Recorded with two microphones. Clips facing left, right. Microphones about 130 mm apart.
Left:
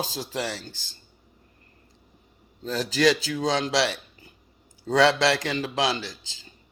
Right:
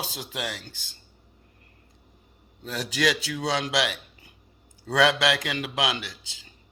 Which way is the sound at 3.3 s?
10° right (ahead or behind).